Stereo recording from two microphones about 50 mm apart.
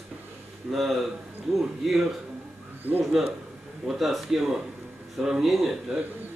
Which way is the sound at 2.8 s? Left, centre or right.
Right.